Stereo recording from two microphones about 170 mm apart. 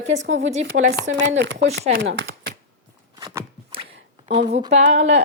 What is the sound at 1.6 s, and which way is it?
Speech, 40° right (ahead or behind).